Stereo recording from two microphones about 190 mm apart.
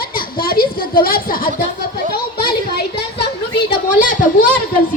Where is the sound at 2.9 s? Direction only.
60° left (ahead or behind).